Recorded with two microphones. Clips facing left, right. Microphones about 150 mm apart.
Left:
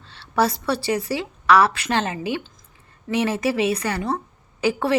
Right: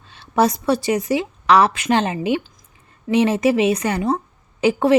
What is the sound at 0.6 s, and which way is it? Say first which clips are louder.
A woman's voice: right 4 dB; 20° right (ahead or behind).